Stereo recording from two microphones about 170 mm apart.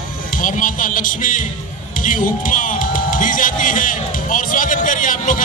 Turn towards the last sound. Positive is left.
turn(degrees=50)  # may be behind; listen again after turning